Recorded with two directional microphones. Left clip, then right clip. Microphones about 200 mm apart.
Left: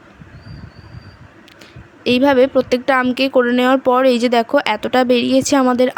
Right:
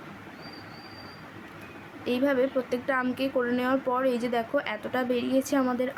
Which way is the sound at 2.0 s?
45° left (ahead or behind).